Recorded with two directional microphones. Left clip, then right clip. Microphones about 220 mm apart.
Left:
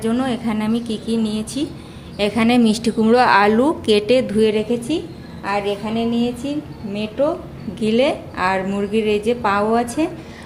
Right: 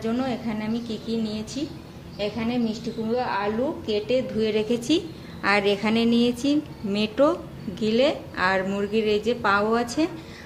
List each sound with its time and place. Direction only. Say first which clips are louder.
0.0 s a woman's voice: left 6 dB; 25° left (ahead or behind)
2.1 s a woman's voice: left 10 dB; 45° left (ahead or behind); by 4.6 s 25° left (ahead or behind)
4.7 s a woman's voice: left 2 dB; centre (ahead or behind)
7.8 s a woman's voice: left 4 dB; 15° left (ahead or behind)